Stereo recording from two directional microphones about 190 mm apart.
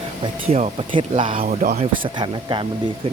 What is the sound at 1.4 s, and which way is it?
Speech, 45° right (ahead or behind).